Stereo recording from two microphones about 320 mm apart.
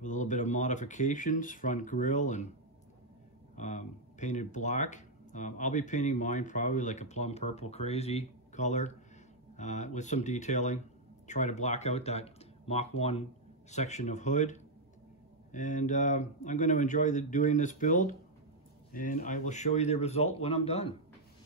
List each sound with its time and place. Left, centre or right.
0.0 s speech: left
3.5 s speech: left